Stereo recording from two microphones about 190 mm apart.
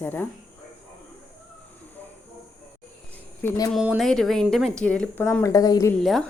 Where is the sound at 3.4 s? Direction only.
20° left (ahead or behind).